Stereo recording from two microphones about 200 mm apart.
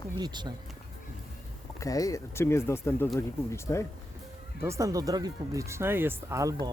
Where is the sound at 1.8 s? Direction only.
15° left (ahead or behind).